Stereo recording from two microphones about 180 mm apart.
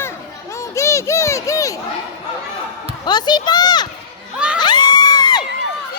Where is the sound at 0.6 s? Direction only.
15° left (ahead or behind).